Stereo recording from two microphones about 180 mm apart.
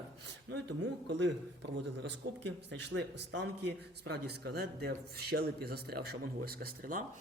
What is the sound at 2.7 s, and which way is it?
Speech, 85° right.